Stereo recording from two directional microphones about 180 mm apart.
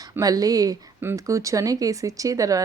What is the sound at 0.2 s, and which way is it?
Speech, 20° right (ahead or behind).